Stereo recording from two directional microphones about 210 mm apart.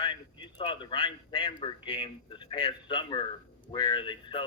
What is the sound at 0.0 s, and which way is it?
A man's voice, 25° left (ahead or behind).